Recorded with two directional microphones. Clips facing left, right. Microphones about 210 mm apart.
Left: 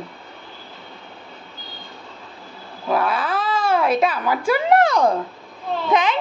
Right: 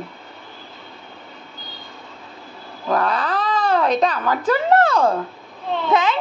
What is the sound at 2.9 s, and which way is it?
A child's voice, 5° left (ahead or behind).